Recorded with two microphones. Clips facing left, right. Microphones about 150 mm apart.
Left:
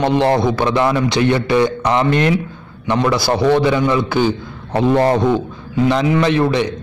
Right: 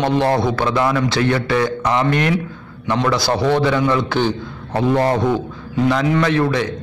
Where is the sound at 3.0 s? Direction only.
10° left (ahead or behind).